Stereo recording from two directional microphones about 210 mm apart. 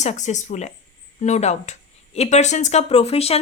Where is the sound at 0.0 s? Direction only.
35° left (ahead or behind).